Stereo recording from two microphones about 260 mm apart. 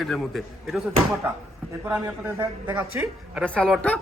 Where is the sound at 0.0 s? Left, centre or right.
Centre.